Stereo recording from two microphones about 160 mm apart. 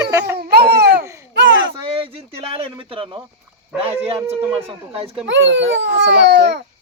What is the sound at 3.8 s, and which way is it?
Speech, 40° right (ahead or behind).